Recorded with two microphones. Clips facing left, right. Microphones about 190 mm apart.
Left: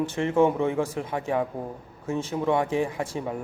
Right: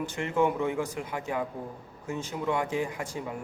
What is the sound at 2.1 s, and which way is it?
A man's voice, 25° left (ahead or behind).